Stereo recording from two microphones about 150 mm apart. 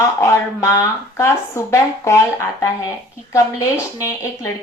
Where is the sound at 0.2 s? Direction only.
20° left (ahead or behind).